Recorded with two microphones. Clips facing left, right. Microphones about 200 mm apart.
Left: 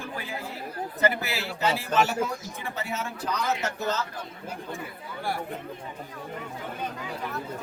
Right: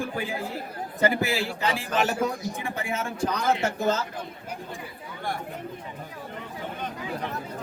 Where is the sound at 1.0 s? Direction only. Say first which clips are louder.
Right 3 dB; 15° right (ahead or behind).